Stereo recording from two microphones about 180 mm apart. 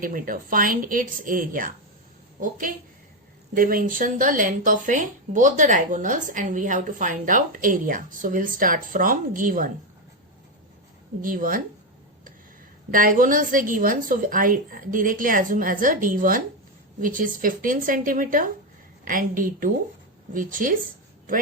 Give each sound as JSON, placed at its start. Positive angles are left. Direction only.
{"t": 0.0, "sound": "speech", "side_deg": -50}
{"t": 11.2, "sound": "speech", "side_deg": -50}
{"t": 12.9, "sound": "speech", "side_deg": -50}